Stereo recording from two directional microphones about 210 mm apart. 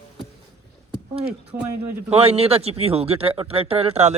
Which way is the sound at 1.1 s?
30° right (ahead or behind).